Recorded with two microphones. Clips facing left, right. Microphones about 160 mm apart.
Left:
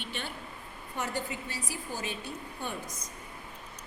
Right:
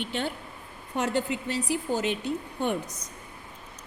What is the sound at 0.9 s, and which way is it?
Speech, 75° right (ahead or behind).